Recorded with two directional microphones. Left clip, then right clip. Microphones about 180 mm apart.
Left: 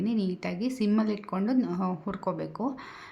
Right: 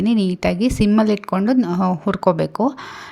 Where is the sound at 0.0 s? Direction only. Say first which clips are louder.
Right 12 dB; 50° right (ahead or behind).